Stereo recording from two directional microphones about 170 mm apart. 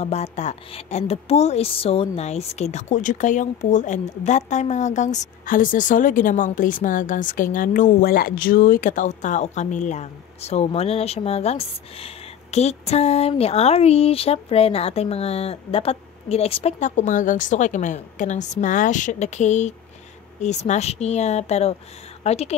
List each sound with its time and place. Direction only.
0.0 s a woman's voice: 40° left (ahead or behind)